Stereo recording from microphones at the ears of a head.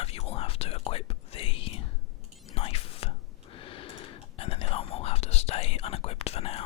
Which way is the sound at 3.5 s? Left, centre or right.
Left.